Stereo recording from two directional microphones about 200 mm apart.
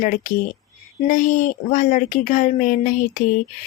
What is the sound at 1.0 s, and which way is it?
A woman's voice, 40° left (ahead or behind).